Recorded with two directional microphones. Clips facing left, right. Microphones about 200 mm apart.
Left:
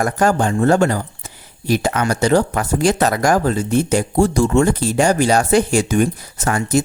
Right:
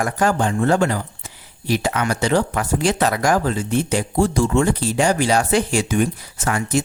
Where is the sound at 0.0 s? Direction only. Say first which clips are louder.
Left 3 dB; 45° left (ahead or behind).